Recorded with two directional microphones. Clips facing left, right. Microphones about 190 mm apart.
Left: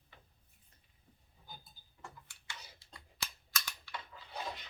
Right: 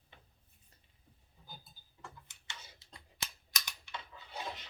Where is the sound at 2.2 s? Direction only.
20° right (ahead or behind).